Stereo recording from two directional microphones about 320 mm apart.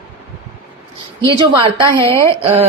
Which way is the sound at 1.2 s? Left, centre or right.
Centre.